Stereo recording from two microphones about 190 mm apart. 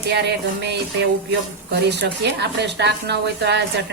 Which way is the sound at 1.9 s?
65° right (ahead or behind).